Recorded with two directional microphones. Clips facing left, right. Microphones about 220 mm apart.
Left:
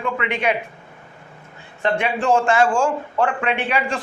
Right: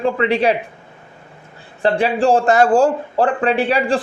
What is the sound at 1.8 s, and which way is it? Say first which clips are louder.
Speech: right 5 dB; 35° right (ahead or behind).